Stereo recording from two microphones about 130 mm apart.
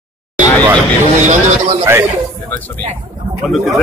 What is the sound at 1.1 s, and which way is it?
Speech, 65° right (ahead or behind).